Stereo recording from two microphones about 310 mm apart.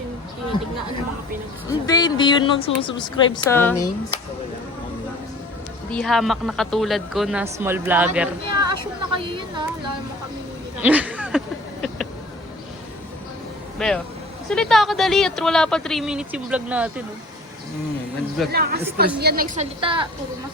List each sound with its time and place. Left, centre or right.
1.9 s speech: centre
5.9 s speech: centre
8.7 s a woman's voice: centre
10.8 s a sound: centre
13.7 s speech: centre
18.5 s a woman's voice: right
19.8 s a woman's voice: centre